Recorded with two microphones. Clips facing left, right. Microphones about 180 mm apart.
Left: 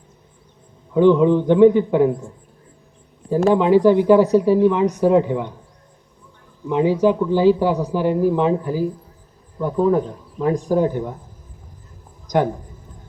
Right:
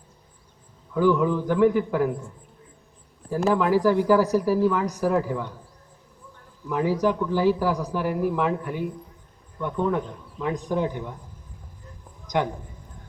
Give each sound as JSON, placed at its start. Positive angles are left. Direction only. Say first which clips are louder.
{"t": 0.9, "sound": "a man's voice", "louder": "left 7 dB", "side_deg": 25}
{"t": 6.7, "sound": "a man's voice", "louder": "left 6 dB", "side_deg": 25}